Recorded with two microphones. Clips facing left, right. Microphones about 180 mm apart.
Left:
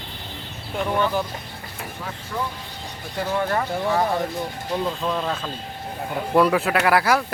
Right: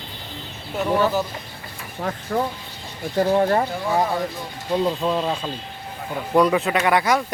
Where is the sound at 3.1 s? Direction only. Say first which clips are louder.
Right 6 dB; 35° right (ahead or behind).